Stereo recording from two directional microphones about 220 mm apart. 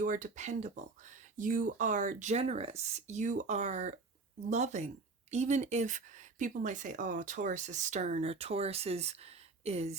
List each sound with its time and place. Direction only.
0.0 s speech: 35° right (ahead or behind)